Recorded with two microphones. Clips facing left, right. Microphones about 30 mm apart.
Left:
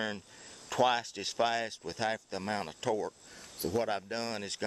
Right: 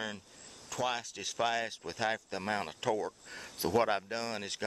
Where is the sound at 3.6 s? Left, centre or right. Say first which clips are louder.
Right 2 dB; right.